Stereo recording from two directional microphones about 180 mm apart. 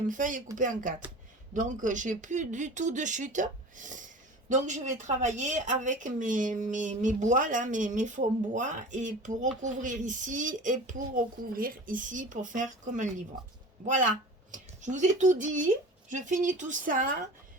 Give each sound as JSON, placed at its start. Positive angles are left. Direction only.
{"t": 0.1, "sound": "speech", "side_deg": -45}